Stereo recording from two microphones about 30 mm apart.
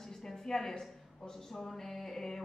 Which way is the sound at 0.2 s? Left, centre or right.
Centre.